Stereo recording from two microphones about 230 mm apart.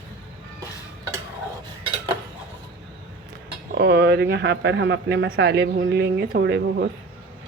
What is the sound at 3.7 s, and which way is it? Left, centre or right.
Speech, right.